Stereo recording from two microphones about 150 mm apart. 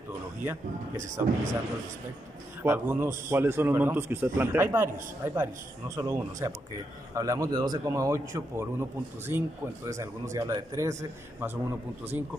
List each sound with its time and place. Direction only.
0.9 s speech: 55° right (ahead or behind)
2.6 s a man's voice: 15° right (ahead or behind)